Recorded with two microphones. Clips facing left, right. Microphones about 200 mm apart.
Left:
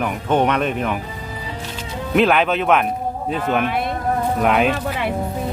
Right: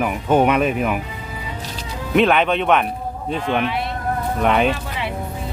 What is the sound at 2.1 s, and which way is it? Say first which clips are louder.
Speech: even; centre (ahead or behind).